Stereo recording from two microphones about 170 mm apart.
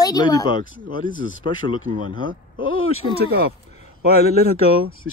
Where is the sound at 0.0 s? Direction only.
25° left (ahead or behind).